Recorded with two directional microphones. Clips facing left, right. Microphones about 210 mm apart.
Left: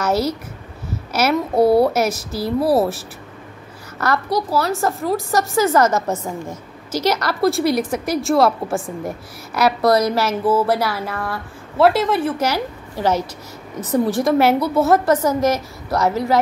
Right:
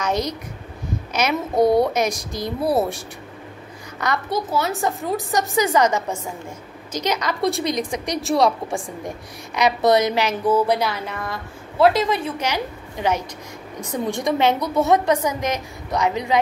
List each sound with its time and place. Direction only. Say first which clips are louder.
0.1 s speech: left 4 dB; 5° left (ahead or behind)
4.0 s a child's voice: left 3 dB; 20° right (ahead or behind)
4.6 s speech: left 3 dB; centre (ahead or behind)
5.7 s a woman's voice: left 3 dB; 15° right (ahead or behind)
7.4 s speech: left 6 dB; 5° left (ahead or behind)
13.7 s speech: left 7 dB; 5° left (ahead or behind)
15.0 s a woman's voice: left 4 dB; 15° right (ahead or behind)